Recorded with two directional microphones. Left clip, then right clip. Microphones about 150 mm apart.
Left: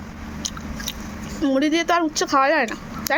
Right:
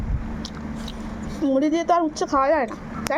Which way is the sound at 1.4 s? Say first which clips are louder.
Even; 10° left (ahead or behind).